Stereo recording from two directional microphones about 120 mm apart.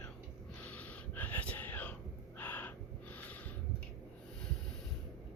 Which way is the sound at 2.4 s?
15° left (ahead or behind).